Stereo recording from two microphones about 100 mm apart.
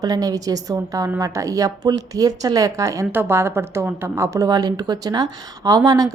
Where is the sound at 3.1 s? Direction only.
25° right (ahead or behind).